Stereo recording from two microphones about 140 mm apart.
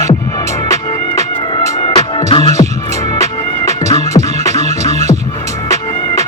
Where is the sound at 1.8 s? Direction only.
40° left (ahead or behind).